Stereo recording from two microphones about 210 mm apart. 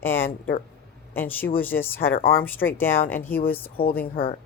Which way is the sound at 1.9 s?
45° left (ahead or behind).